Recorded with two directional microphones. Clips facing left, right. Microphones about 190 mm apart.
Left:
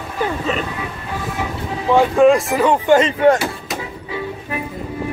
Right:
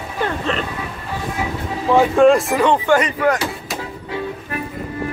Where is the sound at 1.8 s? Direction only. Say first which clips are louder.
Even; centre (ahead or behind).